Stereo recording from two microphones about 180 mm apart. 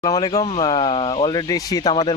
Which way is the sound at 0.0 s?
25° left (ahead or behind).